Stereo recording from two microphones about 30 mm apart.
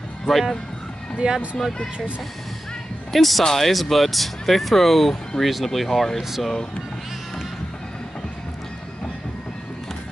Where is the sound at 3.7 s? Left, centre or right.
Centre.